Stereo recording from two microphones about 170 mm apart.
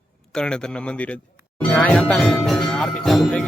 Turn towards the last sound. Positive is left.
turn(degrees=0)  # may be behind; listen again after turning